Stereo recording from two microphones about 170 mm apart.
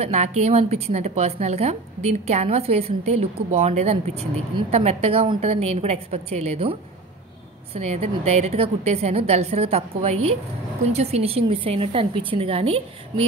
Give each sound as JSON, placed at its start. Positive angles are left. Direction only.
{"t": 0.0, "sound": "a woman's voice", "side_deg": -40}